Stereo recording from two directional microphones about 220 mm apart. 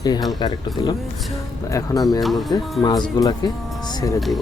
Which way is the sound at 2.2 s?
Centre (ahead or behind).